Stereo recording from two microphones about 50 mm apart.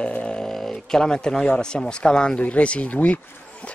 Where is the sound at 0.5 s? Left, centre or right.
Centre.